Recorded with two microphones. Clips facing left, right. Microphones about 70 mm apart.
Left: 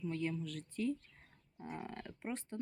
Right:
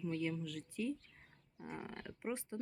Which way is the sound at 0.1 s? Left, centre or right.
Centre.